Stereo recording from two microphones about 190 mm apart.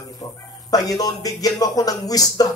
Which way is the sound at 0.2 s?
20° left (ahead or behind).